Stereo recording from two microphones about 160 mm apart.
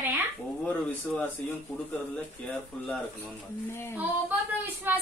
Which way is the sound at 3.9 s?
10° right (ahead or behind).